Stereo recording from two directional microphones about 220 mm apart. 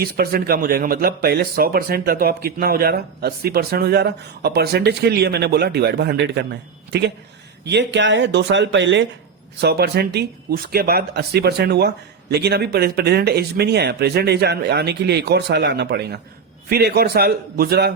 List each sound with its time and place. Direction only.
0.0 s speech: 40° right (ahead or behind)